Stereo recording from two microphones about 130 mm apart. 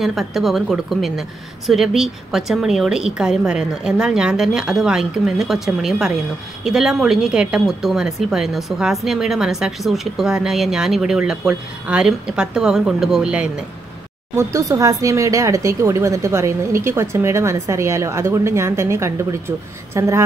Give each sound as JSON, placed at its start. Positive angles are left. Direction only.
{"t": 0.0, "sound": "speech", "side_deg": 0}
{"t": 14.3, "sound": "speech", "side_deg": -25}